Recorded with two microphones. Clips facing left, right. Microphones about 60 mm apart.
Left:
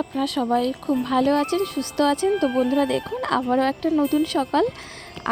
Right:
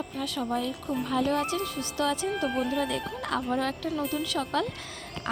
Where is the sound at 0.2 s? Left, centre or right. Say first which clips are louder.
Left 9 dB; left.